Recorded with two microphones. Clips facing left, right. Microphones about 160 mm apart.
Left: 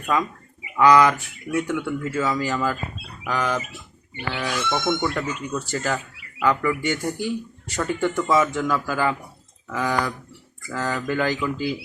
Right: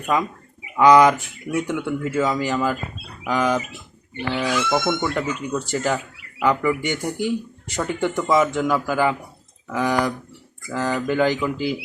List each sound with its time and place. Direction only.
0.0 s speech: 15° right (ahead or behind)
4.7 s speech: 20° right (ahead or behind)